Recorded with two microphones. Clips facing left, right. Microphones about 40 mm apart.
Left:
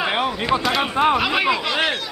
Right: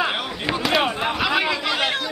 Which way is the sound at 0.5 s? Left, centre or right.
Centre.